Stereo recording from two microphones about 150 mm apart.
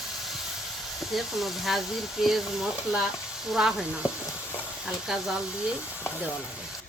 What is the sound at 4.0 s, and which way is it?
Stir, 20° left (ahead or behind).